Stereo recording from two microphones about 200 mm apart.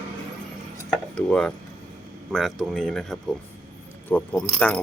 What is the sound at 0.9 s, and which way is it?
Cutlery, 5° left (ahead or behind).